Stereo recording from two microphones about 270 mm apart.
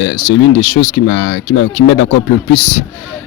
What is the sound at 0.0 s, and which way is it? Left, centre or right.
Speech, left.